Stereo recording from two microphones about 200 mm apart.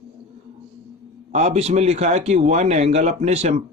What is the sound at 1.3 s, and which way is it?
A man's voice, 35° right (ahead or behind).